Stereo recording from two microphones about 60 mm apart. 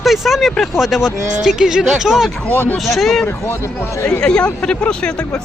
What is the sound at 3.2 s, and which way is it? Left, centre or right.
Speech, left.